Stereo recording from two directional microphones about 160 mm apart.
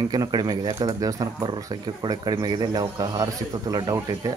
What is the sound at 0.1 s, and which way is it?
Speech, 25° right (ahead or behind).